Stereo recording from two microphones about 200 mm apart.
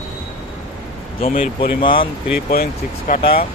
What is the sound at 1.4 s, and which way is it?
Speech, 25° left (ahead or behind).